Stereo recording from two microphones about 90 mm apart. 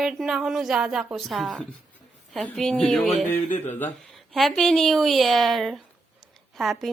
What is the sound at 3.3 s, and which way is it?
Speech, 20° left (ahead or behind).